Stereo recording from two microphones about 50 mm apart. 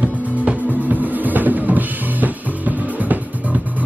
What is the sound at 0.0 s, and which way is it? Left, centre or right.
Music, right.